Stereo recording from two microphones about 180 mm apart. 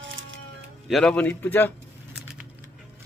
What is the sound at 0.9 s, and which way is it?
Speech, centre (ahead or behind).